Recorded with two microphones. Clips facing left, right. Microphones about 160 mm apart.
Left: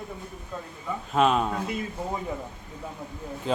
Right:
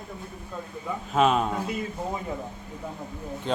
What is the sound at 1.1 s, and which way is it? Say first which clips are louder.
Speech: even; centre (ahead or behind).